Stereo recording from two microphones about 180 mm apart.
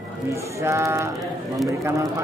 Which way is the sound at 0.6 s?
15° right (ahead or behind).